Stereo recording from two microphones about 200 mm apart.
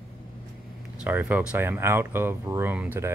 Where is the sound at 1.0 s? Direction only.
10° right (ahead or behind).